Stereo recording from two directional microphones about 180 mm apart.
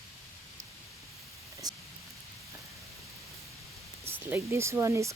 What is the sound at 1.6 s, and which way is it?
Rain, 20° right (ahead or behind).